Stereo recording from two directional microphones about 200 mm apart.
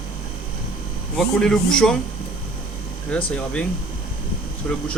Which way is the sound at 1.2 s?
5° left (ahead or behind).